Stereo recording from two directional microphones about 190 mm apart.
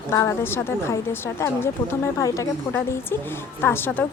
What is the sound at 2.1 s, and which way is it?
A woman's voice, 15° left (ahead or behind).